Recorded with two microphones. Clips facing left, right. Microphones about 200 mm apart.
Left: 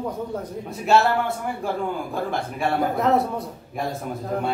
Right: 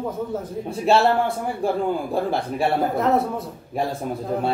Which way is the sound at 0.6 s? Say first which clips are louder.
Right 1 dB; 30° right (ahead or behind).